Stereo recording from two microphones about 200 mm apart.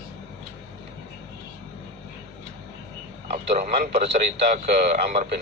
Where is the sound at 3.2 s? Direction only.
30° right (ahead or behind).